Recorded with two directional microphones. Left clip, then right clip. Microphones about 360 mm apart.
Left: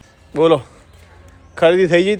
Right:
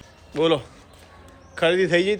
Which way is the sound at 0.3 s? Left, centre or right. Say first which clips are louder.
Left 7 dB; centre.